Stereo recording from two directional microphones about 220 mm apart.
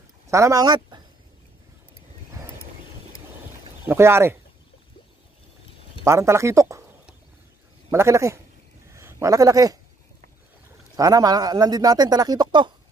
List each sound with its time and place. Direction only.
0.3 s speech: 15° right (ahead or behind)
3.8 s speech: 10° right (ahead or behind)
6.0 s speech: 15° right (ahead or behind)
7.9 s speech: 15° right (ahead or behind)
11.0 s speech: 15° right (ahead or behind)